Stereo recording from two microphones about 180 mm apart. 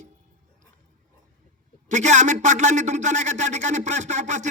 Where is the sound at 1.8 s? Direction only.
40° right (ahead or behind).